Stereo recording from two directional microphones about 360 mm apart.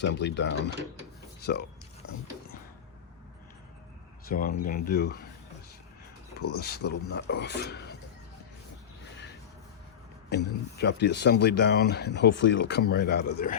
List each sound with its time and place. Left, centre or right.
0.0 s speech: left
4.3 s speech: left
6.5 s speech: left
10.2 s speech: left